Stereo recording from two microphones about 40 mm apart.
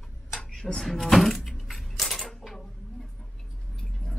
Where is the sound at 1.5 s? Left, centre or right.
Centre.